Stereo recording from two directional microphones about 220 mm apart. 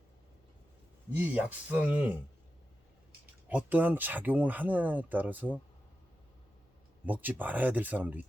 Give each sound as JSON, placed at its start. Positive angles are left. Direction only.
{"t": 1.1, "sound": "speech", "side_deg": -5}
{"t": 3.5, "sound": "speech", "side_deg": -10}
{"t": 7.0, "sound": "speech", "side_deg": -10}